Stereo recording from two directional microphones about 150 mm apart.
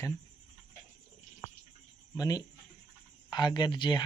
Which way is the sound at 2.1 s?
25° left (ahead or behind).